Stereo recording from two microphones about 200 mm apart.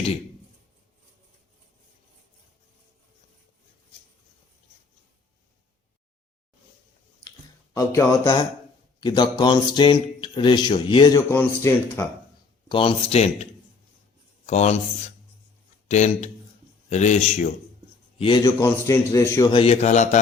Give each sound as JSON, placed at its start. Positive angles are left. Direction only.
{"t": 7.7, "sound": "a man's voice", "side_deg": 15}
{"t": 12.6, "sound": "a man's voice", "side_deg": 25}
{"t": 15.9, "sound": "a man's voice", "side_deg": 35}
{"t": 18.2, "sound": "speech", "side_deg": 25}
{"t": 18.6, "sound": "a man's voice", "side_deg": 15}
{"t": 19.5, "sound": "a man's voice", "side_deg": 30}